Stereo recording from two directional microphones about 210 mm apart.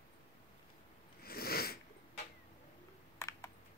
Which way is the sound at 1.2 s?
45° left (ahead or behind).